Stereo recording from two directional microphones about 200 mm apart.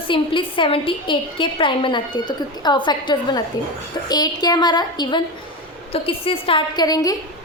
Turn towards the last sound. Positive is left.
turn(degrees=20)  # may be behind; listen again after turning